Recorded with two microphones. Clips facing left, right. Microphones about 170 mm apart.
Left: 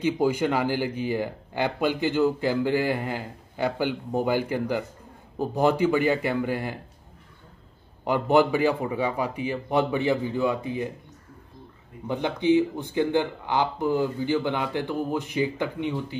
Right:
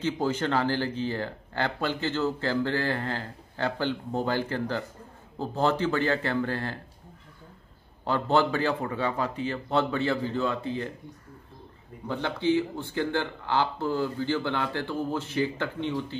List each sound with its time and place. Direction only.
0.0 s speech: 10° left (ahead or behind)
8.0 s speech: 15° left (ahead or behind)
12.1 s speech: 15° left (ahead or behind)